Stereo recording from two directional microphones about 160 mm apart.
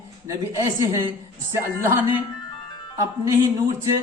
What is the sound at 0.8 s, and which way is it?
A woman's voice, 20° right (ahead or behind).